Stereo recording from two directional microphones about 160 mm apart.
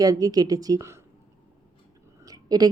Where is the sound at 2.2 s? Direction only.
25° right (ahead or behind).